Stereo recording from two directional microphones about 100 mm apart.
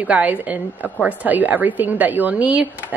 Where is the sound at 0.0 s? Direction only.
15° right (ahead or behind).